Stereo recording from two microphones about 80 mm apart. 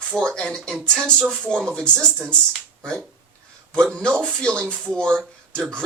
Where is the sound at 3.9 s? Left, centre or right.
Centre.